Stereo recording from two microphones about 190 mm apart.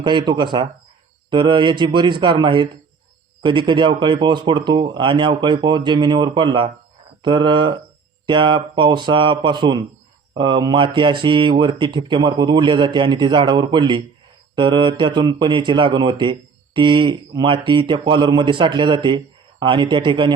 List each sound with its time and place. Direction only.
0.0 s speech: 25° right (ahead or behind)